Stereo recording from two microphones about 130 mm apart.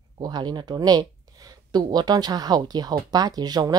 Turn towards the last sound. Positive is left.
turn(degrees=-30)  # may be behind; listen again after turning